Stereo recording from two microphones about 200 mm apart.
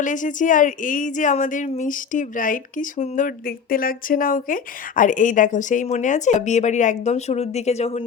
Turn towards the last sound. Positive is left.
turn(degrees=35)  # may be behind; listen again after turning